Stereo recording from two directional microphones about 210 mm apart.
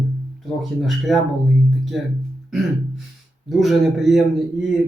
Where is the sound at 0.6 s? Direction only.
Centre (ahead or behind).